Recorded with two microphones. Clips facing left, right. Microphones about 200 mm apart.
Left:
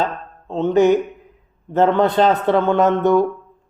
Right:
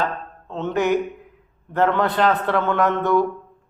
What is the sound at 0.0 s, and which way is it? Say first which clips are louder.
Speech: left 3 dB; 25° left (ahead or behind).